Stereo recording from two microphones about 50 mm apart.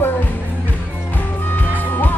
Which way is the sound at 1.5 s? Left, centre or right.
Left.